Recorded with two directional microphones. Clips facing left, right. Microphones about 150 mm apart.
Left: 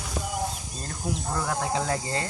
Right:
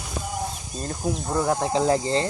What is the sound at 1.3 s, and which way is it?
Speech, 25° right (ahead or behind).